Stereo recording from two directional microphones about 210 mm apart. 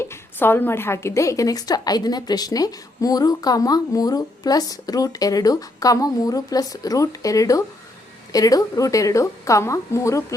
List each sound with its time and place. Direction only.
0.0 s a woman's voice: 10° left (ahead or behind)